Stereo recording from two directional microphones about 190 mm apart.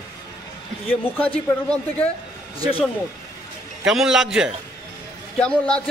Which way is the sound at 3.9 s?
Centre (ahead or behind).